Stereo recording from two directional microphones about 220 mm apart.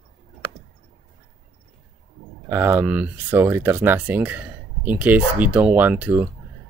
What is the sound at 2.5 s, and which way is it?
Speech, 10° right (ahead or behind).